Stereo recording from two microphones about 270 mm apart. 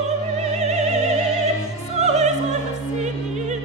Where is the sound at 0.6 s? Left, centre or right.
Right.